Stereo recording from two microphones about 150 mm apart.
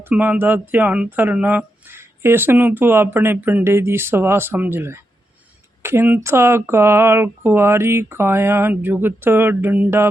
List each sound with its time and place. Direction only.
0.1 s speech: 10° right (ahead or behind)